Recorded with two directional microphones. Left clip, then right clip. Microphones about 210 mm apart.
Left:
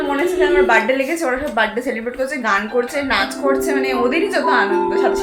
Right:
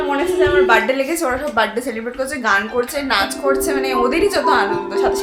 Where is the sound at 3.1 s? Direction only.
10° right (ahead or behind).